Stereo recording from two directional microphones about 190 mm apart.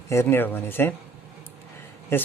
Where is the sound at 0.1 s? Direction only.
15° left (ahead or behind).